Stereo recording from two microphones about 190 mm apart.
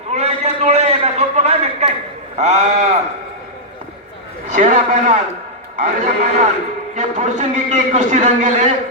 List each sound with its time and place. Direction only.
0.1 s a sound: 35° right (ahead or behind)
2.4 s a man's voice: 35° right (ahead or behind)
4.5 s a man's voice: 40° right (ahead or behind)